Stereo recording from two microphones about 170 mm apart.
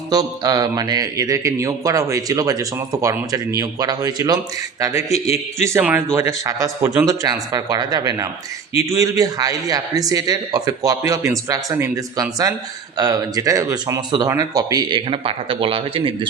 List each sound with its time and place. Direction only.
0.1 s a man's voice: 25° right (ahead or behind)